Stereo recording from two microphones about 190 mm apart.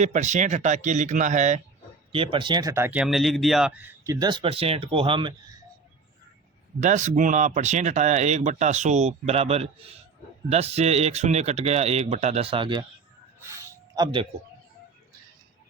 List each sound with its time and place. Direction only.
0.0 s speech: 40° right (ahead or behind)
2.1 s speech: 25° right (ahead or behind)
6.7 s speech: 40° right (ahead or behind)
13.5 s a sound: 20° right (ahead or behind)